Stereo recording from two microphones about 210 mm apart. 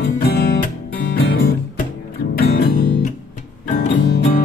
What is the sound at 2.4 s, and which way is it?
Music, 45° left (ahead or behind).